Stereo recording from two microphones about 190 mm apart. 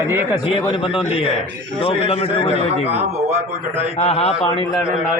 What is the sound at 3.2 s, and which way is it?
Speech, 10° right (ahead or behind).